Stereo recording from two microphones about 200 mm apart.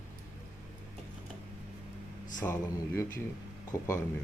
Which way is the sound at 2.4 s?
15° left (ahead or behind).